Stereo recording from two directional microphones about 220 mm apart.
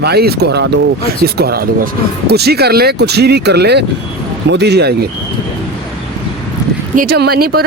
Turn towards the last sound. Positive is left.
turn(degrees=-45)  # may be behind; listen again after turning